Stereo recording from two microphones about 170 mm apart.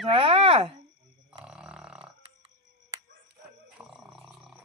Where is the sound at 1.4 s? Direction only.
5° right (ahead or behind).